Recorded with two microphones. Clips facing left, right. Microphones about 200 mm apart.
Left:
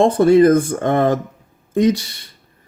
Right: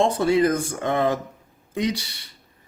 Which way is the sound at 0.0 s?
50° left (ahead or behind).